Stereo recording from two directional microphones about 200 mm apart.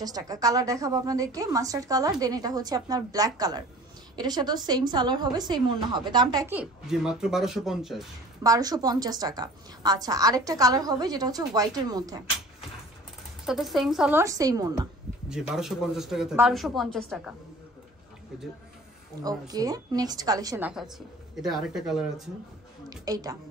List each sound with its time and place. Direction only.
0.0 s a woman's voice: 20° right (ahead or behind)
6.5 s speech: 5° right (ahead or behind)
8.4 s a woman's voice: 20° right (ahead or behind)
13.5 s speech: centre (ahead or behind)
14.2 s a woman's voice: 15° right (ahead or behind)
15.2 s speech: 5° right (ahead or behind)
19.2 s a woman's voice: 20° right (ahead or behind); by 22.1 s centre (ahead or behind)
22.8 s a woman's voice: 20° right (ahead or behind)